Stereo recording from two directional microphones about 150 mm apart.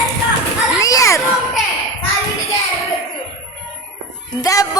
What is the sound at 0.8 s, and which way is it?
Speech, 20° left (ahead or behind).